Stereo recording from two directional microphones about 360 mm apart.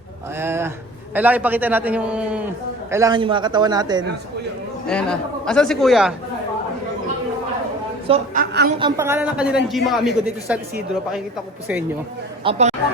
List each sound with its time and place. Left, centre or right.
0.3 s a man's voice: centre
4.9 s a man's voice: centre
8.0 s a woman's voice: centre
8.8 s a man's voice: centre
12.5 s a man's voice: centre